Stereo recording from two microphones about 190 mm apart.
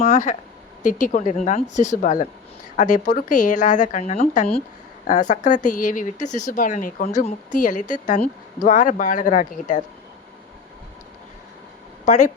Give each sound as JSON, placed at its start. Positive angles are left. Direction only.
{"t": 0.0, "sound": "speech", "side_deg": 40}
{"t": 12.0, "sound": "speech", "side_deg": 40}